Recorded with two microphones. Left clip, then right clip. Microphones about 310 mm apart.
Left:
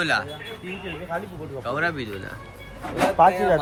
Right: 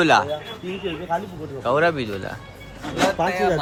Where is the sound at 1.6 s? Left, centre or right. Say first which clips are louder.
Right 6 dB; centre.